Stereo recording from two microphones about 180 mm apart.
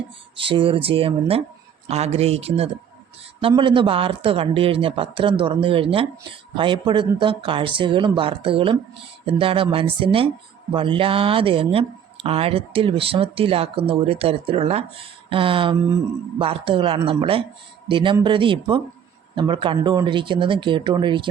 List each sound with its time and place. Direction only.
0.3 s speech: 30° right (ahead or behind)